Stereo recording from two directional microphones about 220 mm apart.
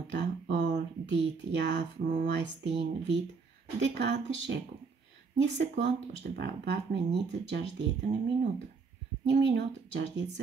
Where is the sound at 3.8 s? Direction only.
50° right (ahead or behind).